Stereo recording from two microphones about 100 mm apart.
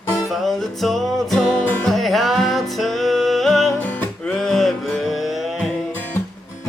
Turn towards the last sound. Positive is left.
turn(degrees=0)  # may be behind; listen again after turning